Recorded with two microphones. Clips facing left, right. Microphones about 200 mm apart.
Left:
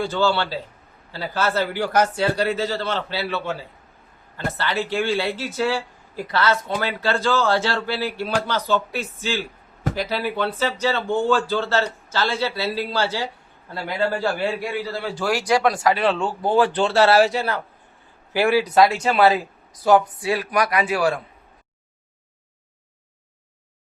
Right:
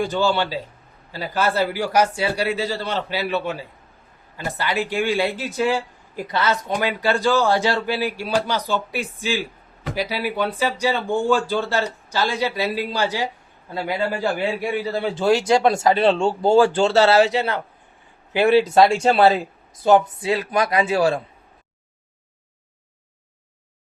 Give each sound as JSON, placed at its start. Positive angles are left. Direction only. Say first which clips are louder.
{"t": 0.0, "sound": "a man's voice", "louder": "right 1 dB", "side_deg": -15}